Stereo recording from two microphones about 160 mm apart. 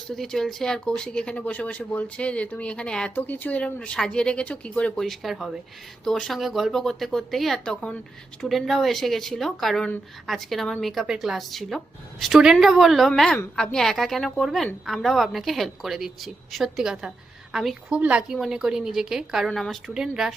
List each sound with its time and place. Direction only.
0.1 s speech: centre (ahead or behind)